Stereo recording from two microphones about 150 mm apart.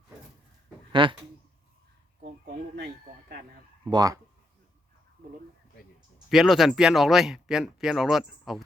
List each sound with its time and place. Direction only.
1.0 s speech: 35° right (ahead or behind)
2.7 s a sound: 90° right
3.8 s speech: 25° right (ahead or behind)
6.2 s speech: centre (ahead or behind)